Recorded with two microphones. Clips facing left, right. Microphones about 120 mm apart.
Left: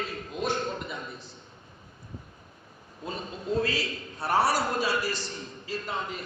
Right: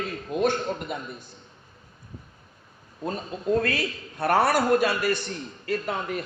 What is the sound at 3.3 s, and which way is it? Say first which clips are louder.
A man's voice: right 4 dB; 50° right (ahead or behind).